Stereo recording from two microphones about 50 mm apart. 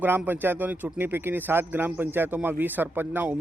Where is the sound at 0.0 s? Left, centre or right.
Right.